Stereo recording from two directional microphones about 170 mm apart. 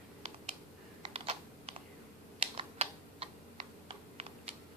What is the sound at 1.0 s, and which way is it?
Typing, 35° right (ahead or behind).